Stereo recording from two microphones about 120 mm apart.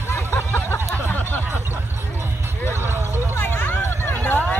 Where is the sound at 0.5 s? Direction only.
20° left (ahead or behind).